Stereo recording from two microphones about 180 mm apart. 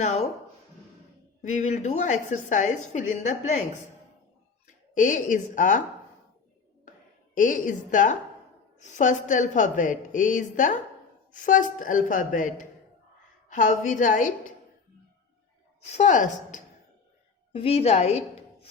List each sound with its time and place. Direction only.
0.0 s a woman's voice: 40° left (ahead or behind)
1.4 s a woman's voice: 40° left (ahead or behind)
4.6 s speech: 45° left (ahead or behind)
7.3 s a woman's voice: 45° left (ahead or behind)
15.8 s a woman's voice: 40° left (ahead or behind)
17.5 s a woman's voice: 30° left (ahead or behind)